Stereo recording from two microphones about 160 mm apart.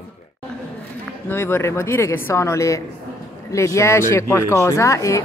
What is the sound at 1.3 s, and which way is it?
A woman's voice, 15° left (ahead or behind).